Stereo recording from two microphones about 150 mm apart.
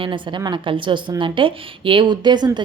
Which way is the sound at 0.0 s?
30° right (ahead or behind).